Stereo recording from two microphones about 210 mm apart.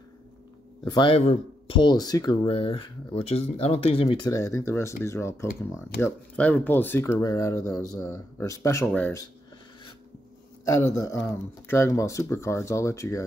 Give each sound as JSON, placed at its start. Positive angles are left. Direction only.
{"t": 0.8, "sound": "speech", "side_deg": 20}
{"t": 11.1, "sound": "speech", "side_deg": 10}